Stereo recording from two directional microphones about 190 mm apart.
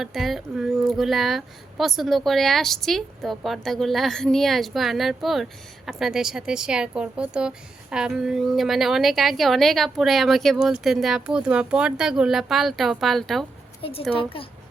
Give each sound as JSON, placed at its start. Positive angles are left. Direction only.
{"t": 0.0, "sound": "speech", "side_deg": 0}
{"t": 14.1, "sound": "a woman's voice", "side_deg": 30}